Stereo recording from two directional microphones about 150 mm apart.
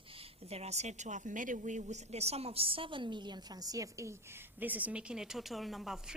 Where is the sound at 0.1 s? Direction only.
40° right (ahead or behind).